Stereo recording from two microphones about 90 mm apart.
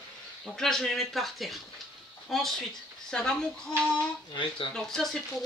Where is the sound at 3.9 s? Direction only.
60° left (ahead or behind).